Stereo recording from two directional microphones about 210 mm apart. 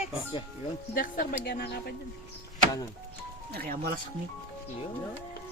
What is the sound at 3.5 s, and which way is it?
Speech, 45° right (ahead or behind).